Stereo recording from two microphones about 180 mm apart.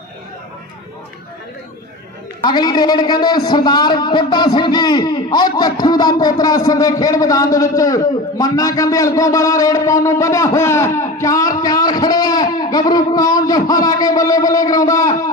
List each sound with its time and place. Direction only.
2.4 s a man's voice: 25° left (ahead or behind)